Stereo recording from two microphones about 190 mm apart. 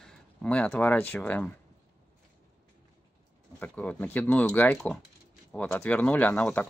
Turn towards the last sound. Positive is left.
turn(degrees=5)  # may be behind; listen again after turning